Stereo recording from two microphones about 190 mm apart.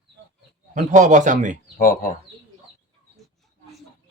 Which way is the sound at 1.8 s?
50° left (ahead or behind).